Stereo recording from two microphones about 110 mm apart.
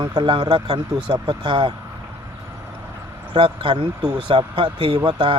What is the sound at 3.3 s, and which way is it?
Speech, 50° right (ahead or behind).